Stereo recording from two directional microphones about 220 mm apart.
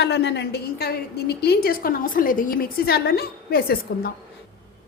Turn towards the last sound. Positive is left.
turn(degrees=45)  # may be behind; listen again after turning